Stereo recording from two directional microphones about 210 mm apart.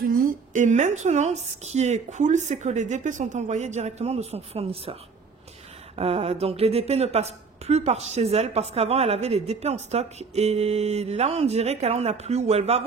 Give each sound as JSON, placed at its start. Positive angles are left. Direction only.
{"t": 0.0, "sound": "speech", "side_deg": -40}
{"t": 5.9, "sound": "speech", "side_deg": -25}